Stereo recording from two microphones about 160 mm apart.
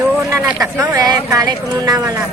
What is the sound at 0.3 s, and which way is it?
A woman's voice, 15° right (ahead or behind).